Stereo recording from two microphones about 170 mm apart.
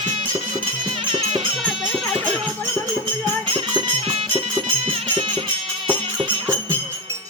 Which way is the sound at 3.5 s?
30° right (ahead or behind).